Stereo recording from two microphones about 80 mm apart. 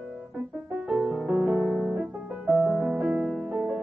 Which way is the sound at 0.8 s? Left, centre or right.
Centre.